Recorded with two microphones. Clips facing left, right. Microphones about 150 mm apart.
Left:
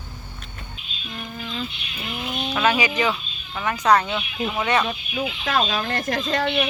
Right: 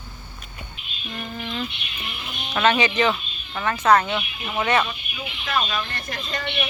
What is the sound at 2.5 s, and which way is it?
Speech, 10° left (ahead or behind).